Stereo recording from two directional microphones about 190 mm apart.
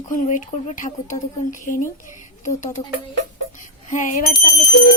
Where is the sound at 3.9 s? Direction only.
40° left (ahead or behind).